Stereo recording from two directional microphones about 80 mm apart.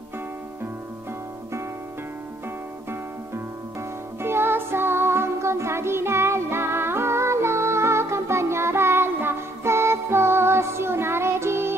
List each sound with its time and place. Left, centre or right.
4.2 s music: right